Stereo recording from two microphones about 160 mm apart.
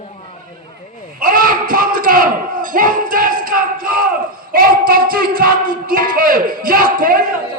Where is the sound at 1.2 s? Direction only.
60° right (ahead or behind).